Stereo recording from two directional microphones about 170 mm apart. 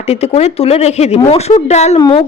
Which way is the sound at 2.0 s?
25° left (ahead or behind).